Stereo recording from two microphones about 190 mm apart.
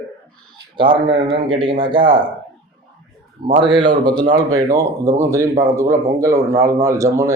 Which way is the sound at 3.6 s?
25° right (ahead or behind).